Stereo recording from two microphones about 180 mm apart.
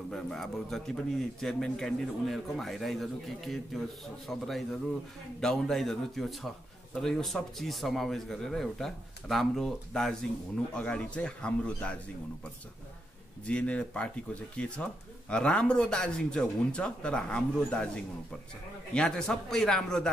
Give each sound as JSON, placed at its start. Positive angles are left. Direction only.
{"t": 0.1, "sound": "a man's voice", "side_deg": 0}
{"t": 13.5, "sound": "a man's voice", "side_deg": 5}
{"t": 18.9, "sound": "a man's voice", "side_deg": 5}